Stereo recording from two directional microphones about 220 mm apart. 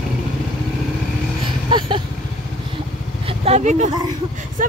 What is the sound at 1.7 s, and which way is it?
Vehicle, 20° right (ahead or behind).